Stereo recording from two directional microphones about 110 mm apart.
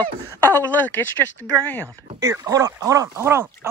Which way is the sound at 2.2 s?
30° right (ahead or behind).